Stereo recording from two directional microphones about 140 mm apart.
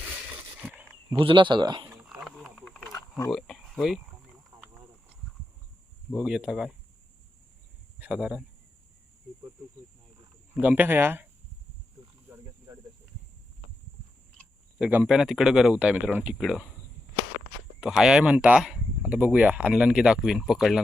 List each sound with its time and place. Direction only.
0.7 s a sound: 15° right (ahead or behind)
1.2 s speech: 35° right (ahead or behind)
1.9 s wild animals: 5° right (ahead or behind)
2.9 s wild animals: 20° left (ahead or behind)
3.3 s speech: centre (ahead or behind)
6.1 s speech: 5° right (ahead or behind)
7.9 s speech: 10° right (ahead or behind)
10.5 s speech: 10° right (ahead or behind)
12.3 s cricket: 25° right (ahead or behind)
14.8 s speech: 10° right (ahead or behind)
17.7 s speech: 5° right (ahead or behind)